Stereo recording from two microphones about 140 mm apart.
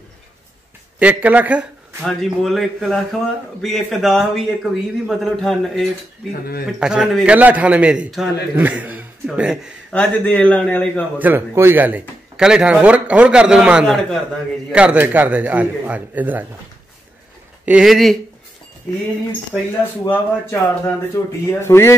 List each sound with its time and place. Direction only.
0.9 s a man's voice: 10° right (ahead or behind)
2.0 s speech: centre (ahead or behind)
9.9 s speech: 10° left (ahead or behind)
11.1 s speech: 15° right (ahead or behind); by 14.1 s 5° left (ahead or behind)
14.7 s speech: 10° right (ahead or behind)
17.6 s speech: 5° right (ahead or behind)
20.1 s speech: 15° left (ahead or behind)